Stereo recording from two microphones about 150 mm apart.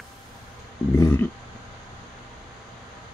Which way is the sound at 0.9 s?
25° left (ahead or behind).